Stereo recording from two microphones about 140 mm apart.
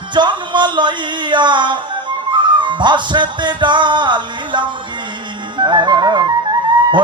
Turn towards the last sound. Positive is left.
turn(degrees=-30)  # may be behind; listen again after turning